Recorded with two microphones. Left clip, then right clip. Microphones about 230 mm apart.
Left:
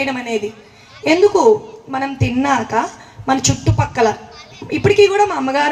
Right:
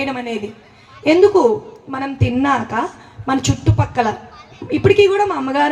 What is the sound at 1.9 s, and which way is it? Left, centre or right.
A man's voice, right.